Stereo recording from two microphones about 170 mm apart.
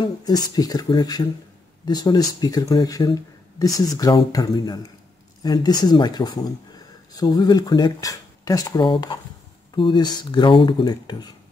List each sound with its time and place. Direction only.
0.0 s speech: 20° left (ahead or behind)